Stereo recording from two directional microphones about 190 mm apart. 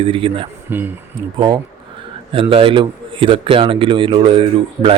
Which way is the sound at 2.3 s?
30° right (ahead or behind).